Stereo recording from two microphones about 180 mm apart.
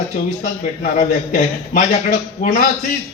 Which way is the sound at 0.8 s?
45° left (ahead or behind).